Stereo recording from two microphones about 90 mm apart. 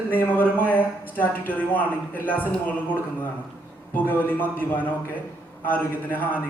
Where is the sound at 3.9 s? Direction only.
20° left (ahead or behind).